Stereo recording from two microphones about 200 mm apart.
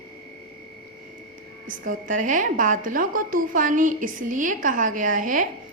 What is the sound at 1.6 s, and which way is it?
A woman's voice, 40° right (ahead or behind).